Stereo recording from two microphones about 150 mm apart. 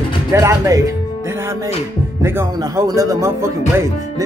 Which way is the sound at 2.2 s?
15° right (ahead or behind).